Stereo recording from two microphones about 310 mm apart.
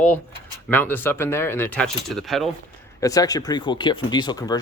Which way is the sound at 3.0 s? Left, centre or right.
Centre.